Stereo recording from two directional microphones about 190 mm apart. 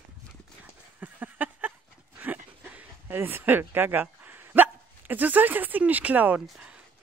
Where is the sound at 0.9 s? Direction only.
10° right (ahead or behind).